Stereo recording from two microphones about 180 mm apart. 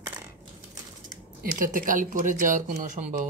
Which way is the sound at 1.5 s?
50° right (ahead or behind).